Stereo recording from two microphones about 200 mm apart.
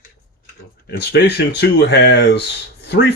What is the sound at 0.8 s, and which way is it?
Speech, 55° left (ahead or behind).